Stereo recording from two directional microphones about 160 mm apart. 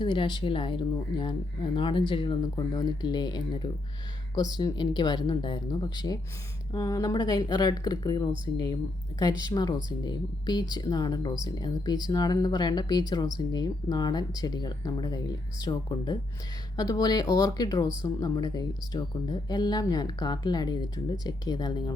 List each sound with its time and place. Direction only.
0.0 s speech: 30° left (ahead or behind)